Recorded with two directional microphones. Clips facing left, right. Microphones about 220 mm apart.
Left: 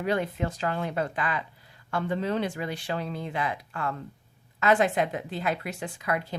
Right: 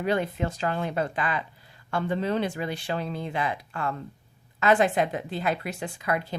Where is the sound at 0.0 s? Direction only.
25° right (ahead or behind).